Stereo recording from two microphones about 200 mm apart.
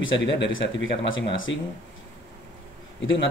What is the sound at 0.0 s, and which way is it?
Speech, 70° left (ahead or behind).